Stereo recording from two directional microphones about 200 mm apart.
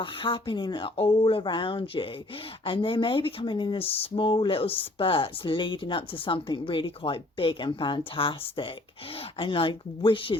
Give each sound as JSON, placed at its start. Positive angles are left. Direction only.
{"t": 0.0, "sound": "speech", "side_deg": 25}